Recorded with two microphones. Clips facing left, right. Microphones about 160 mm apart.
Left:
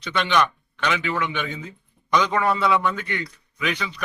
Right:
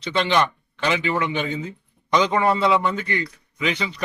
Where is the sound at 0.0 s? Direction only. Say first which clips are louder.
Right 1 dB; 30° right (ahead or behind).